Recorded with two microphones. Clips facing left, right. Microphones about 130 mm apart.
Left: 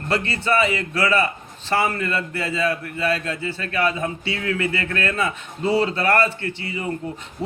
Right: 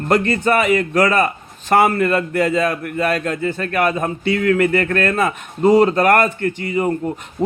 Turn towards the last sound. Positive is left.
turn(degrees=-45)  # may be behind; listen again after turning